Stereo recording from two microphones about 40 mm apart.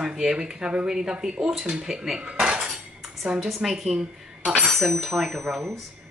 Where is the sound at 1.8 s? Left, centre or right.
Centre.